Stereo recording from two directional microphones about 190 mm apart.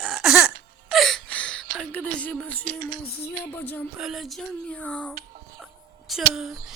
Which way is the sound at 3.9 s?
Centre (ahead or behind).